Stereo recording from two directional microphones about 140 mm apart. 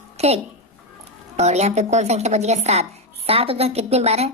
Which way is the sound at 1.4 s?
50° right (ahead or behind).